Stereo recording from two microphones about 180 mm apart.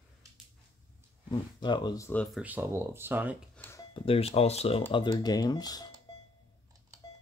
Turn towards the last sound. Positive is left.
turn(degrees=20)  # may be behind; listen again after turning